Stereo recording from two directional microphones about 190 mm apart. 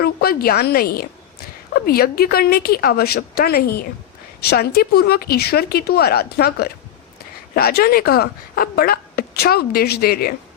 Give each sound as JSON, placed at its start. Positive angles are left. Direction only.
{"t": 0.0, "sound": "speech", "side_deg": 55}